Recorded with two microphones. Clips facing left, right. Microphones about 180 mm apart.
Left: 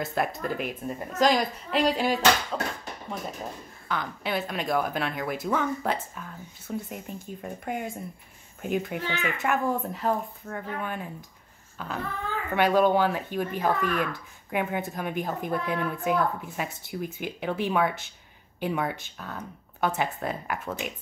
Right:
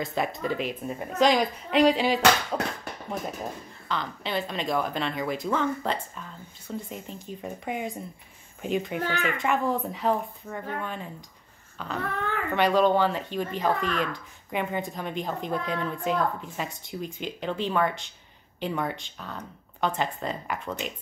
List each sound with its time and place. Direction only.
0.0 s speech: centre (ahead or behind)
3.9 s speech: 5° left (ahead or behind)
12.0 s a child's voice: 70° right (ahead or behind)
12.5 s speech: 10° left (ahead or behind)